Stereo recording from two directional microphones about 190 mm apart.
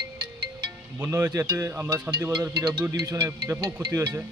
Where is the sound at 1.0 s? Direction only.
15° right (ahead or behind).